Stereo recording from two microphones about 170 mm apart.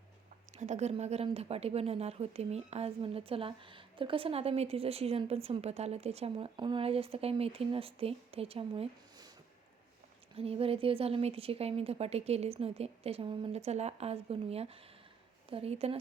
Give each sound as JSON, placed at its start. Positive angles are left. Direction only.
{"t": 0.5, "sound": "speech", "side_deg": -45}
{"t": 10.3, "sound": "speech", "side_deg": -35}